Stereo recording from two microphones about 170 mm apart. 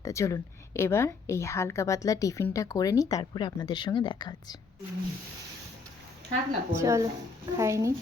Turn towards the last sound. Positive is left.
turn(degrees=-20)  # may be behind; listen again after turning